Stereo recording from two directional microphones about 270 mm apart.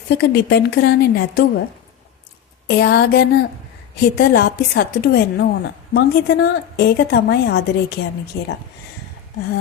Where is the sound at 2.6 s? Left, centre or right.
Left.